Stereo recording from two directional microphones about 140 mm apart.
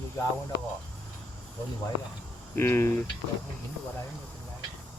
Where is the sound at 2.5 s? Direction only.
15° left (ahead or behind).